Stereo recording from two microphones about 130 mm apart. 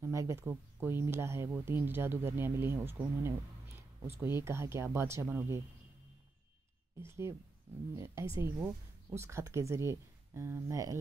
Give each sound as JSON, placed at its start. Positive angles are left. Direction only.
{"t": 0.0, "sound": "speech", "side_deg": -25}
{"t": 7.0, "sound": "speech", "side_deg": -20}